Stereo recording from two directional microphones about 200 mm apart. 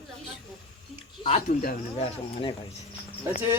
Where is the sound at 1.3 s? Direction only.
45° left (ahead or behind).